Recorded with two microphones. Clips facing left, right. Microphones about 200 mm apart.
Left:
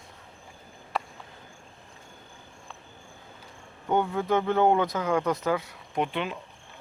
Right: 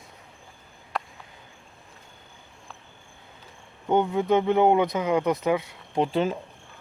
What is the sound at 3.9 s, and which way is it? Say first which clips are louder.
Speech: right 3 dB; 20° right (ahead or behind).